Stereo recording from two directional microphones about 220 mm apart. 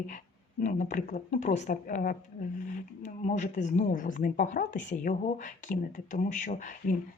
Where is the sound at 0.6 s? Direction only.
35° left (ahead or behind).